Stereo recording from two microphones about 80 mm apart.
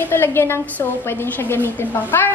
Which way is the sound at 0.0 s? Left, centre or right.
Left.